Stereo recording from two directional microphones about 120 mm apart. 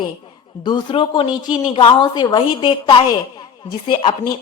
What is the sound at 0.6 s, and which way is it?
A woman's voice, 40° left (ahead or behind).